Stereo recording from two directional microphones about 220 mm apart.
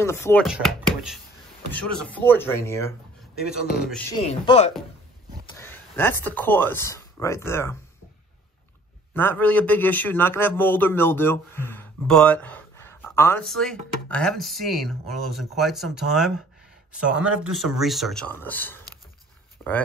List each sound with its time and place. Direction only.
0.0 s a man's voice: 10° left (ahead or behind)
0.5 s a man's voice: centre (ahead or behind)
4.2 s speech: 30° left (ahead or behind)
5.6 s speech: 10° left (ahead or behind)
9.1 s a man's voice: 10° left (ahead or behind)
19.6 s a sound: 10° left (ahead or behind)